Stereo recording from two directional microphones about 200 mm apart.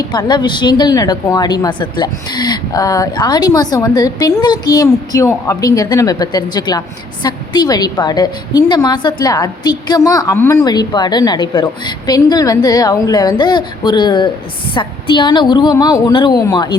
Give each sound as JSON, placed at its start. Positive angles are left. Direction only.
{"t": 0.1, "sound": "a woman's voice", "side_deg": 20}